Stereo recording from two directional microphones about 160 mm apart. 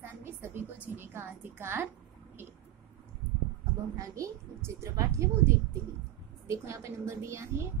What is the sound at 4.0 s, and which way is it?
A woman's voice, 20° right (ahead or behind).